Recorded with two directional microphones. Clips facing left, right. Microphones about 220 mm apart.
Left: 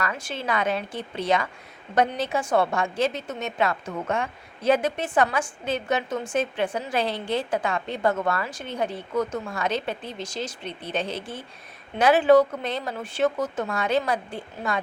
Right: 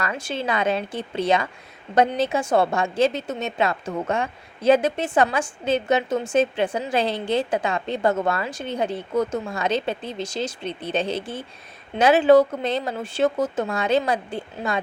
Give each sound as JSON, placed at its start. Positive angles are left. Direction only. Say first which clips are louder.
{"t": 0.0, "sound": "a woman's voice", "louder": "right 3 dB", "side_deg": -25}
{"t": 11.9, "sound": "a woman's voice", "louder": "right 2 dB", "side_deg": -25}